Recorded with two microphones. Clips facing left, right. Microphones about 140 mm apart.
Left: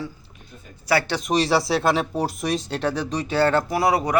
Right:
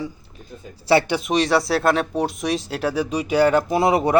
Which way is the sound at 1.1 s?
5° right (ahead or behind).